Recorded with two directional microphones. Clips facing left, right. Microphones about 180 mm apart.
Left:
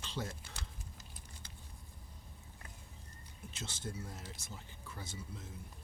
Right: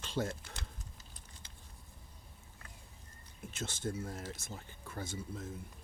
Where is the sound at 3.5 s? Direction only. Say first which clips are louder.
Right 6 dB; 50° right (ahead or behind).